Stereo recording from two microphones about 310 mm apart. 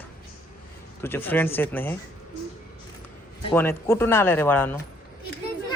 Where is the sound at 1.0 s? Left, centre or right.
Centre.